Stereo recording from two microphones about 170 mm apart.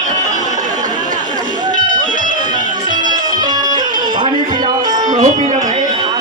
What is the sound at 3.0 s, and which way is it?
Music, 25° right (ahead or behind).